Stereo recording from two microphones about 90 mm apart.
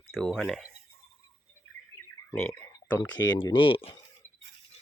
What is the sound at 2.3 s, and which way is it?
Speech, 25° left (ahead or behind).